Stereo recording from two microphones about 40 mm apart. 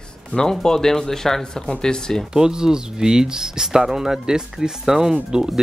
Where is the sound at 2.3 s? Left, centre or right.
Centre.